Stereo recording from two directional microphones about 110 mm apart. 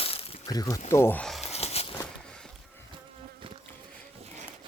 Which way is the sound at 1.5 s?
70° left (ahead or behind).